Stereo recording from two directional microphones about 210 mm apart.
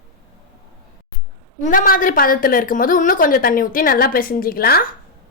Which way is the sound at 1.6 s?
40° left (ahead or behind).